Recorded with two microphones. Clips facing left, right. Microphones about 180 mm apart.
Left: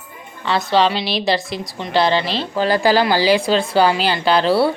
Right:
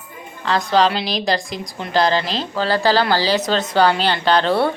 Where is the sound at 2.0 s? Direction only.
40° right (ahead or behind).